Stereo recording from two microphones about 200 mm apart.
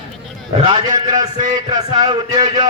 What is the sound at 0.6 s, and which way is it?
A man's voice, 20° right (ahead or behind).